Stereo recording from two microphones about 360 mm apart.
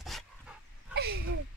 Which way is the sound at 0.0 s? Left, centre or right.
Centre.